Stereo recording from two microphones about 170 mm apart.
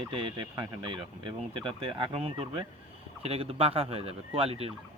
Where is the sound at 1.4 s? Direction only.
30° right (ahead or behind).